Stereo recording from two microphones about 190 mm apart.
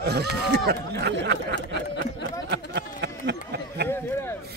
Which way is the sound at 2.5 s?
60° right (ahead or behind).